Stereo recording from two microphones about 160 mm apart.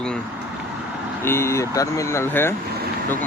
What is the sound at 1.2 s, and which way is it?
Speech, 15° left (ahead or behind).